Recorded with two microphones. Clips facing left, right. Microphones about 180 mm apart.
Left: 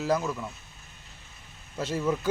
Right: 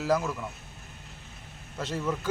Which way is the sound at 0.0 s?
Centre (ahead or behind).